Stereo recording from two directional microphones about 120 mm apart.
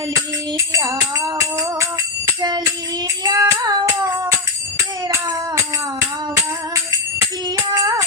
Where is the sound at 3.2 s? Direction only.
35° right (ahead or behind).